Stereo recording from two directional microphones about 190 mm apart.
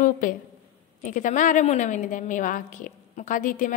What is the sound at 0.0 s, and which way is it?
A woman's voice, 45° left (ahead or behind).